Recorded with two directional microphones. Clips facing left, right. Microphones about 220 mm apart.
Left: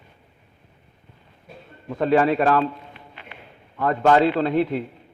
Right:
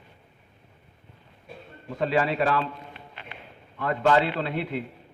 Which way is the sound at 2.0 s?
50° left (ahead or behind).